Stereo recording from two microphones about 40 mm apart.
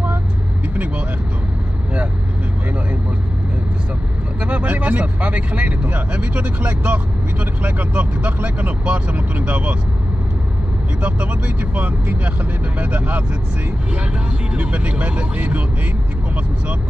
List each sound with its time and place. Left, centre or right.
4.4 s speech: right
11.0 s speech: right
14.6 s speech: right